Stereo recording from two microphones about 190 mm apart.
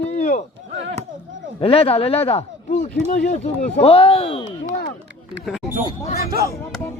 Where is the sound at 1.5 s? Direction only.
30° left (ahead or behind).